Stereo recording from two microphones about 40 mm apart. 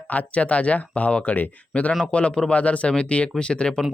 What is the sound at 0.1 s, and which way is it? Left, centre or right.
Speech, left.